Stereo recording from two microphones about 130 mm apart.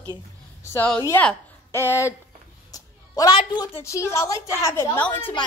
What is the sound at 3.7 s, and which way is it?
A woman's voice, 20° left (ahead or behind).